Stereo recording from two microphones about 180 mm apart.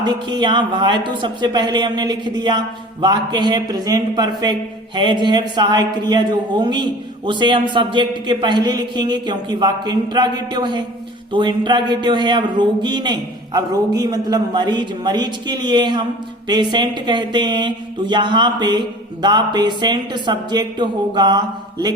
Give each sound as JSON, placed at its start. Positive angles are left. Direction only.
{"t": 0.0, "sound": "a man's voice", "side_deg": -25}